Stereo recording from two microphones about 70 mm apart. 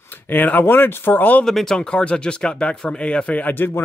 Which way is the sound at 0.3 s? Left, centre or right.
Left.